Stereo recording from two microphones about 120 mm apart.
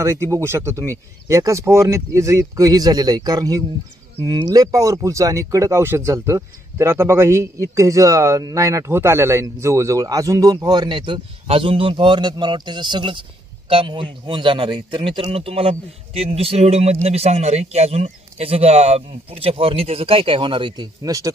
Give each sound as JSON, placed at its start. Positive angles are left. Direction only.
{"t": 0.0, "sound": "a man's voice", "side_deg": -25}